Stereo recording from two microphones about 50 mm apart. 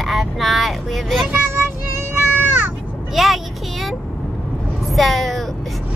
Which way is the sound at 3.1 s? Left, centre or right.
Centre.